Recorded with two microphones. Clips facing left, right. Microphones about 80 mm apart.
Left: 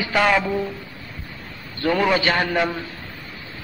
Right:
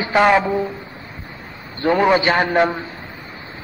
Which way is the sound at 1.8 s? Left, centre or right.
Right.